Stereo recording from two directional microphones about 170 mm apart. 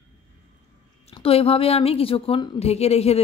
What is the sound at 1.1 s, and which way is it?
A woman's voice, 35° left (ahead or behind).